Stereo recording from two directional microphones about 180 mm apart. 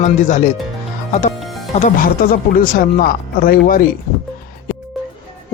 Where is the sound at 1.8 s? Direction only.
50° left (ahead or behind).